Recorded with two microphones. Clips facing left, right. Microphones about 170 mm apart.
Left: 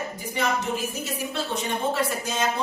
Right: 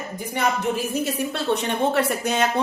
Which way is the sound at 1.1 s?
65° right (ahead or behind).